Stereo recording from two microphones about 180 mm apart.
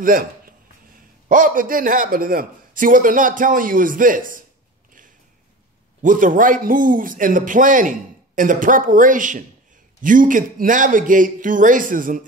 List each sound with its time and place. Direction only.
0.0 s a man's voice: 50° right (ahead or behind)
6.0 s a man's voice: 45° right (ahead or behind)